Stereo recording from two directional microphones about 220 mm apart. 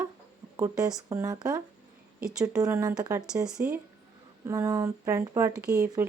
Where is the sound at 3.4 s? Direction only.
5° right (ahead or behind).